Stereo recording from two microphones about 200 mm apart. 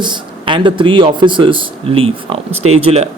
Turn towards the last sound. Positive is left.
turn(degrees=-30)  # may be behind; listen again after turning